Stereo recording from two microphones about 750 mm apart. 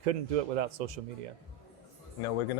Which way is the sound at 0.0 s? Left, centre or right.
Right.